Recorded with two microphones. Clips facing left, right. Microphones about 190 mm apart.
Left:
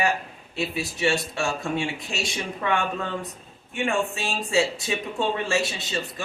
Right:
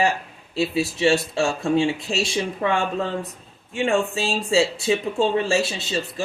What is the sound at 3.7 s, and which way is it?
Speech, 30° right (ahead or behind).